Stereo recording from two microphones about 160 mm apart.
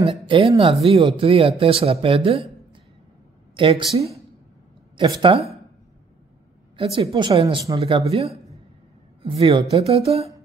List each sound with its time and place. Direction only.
0.3 s speech: 35° right (ahead or behind)
4.9 s speech: 30° right (ahead or behind)
6.8 s speech: 35° right (ahead or behind)